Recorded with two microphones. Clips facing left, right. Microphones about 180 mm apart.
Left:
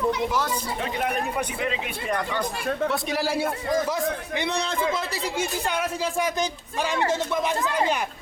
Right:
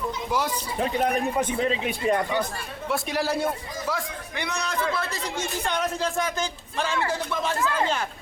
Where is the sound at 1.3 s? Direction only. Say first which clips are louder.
Right 3 dB; 30° right (ahead or behind).